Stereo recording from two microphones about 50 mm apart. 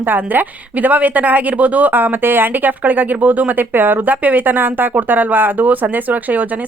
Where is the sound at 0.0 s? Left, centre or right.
Right.